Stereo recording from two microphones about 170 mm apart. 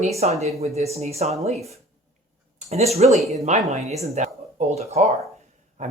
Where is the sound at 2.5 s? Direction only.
40° right (ahead or behind).